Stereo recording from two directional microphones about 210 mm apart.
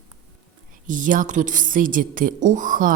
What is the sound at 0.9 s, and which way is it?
A woman's voice, 40° right (ahead or behind).